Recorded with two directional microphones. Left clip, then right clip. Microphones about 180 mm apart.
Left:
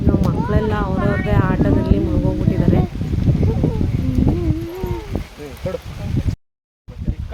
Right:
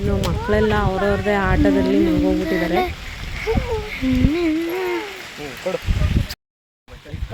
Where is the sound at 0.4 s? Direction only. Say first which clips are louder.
Right 3 dB; 20° right (ahead or behind).